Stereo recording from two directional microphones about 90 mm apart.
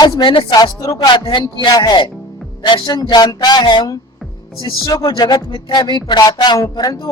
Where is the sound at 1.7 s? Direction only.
50° left (ahead or behind).